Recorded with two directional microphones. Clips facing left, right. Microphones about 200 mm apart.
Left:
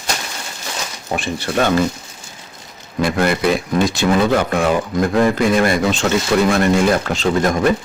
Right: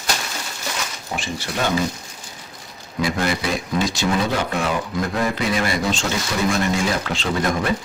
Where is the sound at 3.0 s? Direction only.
55° left (ahead or behind).